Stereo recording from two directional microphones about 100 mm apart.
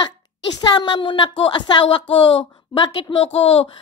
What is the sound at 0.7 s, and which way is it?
Speech, 50° left (ahead or behind).